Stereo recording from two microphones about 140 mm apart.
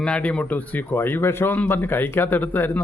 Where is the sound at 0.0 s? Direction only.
10° left (ahead or behind).